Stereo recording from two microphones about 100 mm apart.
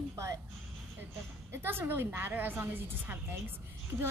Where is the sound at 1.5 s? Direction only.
25° right (ahead or behind).